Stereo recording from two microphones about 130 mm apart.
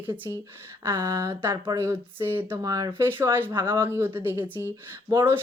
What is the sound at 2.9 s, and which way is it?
A woman's voice, 15° right (ahead or behind).